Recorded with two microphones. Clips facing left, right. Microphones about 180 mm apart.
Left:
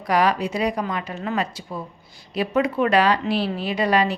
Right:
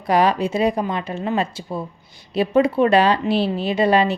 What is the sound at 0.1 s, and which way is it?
Speech, 25° right (ahead or behind).